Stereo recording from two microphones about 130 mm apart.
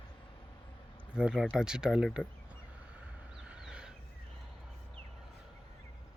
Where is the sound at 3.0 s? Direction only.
5° right (ahead or behind).